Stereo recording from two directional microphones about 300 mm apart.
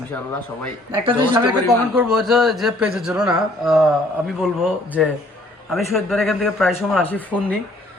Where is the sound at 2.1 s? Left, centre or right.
Centre.